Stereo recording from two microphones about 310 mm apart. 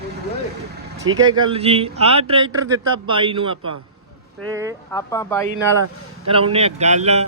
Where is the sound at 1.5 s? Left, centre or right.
Centre.